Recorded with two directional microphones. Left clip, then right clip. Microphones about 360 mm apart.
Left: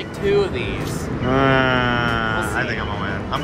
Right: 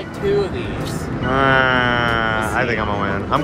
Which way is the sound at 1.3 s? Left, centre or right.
Centre.